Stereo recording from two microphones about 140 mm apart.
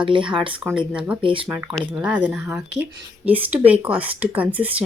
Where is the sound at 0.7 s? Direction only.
10° right (ahead or behind).